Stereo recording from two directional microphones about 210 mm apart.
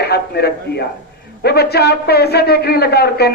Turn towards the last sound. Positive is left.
turn(degrees=50)  # may be behind; listen again after turning